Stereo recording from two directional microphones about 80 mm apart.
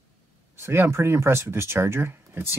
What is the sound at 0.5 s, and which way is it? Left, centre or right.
Speech, right.